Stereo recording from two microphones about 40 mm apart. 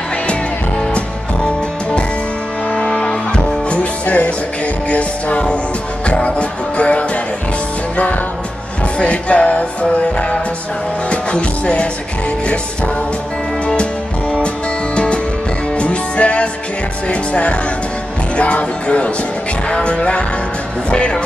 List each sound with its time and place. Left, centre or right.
0.9 s music: left
3.7 s music: left
8.9 s music: left
15.8 s music: left